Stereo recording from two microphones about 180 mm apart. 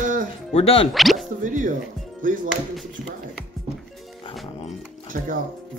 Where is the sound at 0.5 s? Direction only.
35° left (ahead or behind).